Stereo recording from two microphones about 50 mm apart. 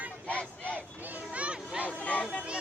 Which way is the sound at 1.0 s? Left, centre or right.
Right.